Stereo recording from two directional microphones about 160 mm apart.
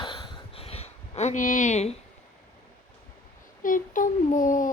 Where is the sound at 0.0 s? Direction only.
35° left (ahead or behind).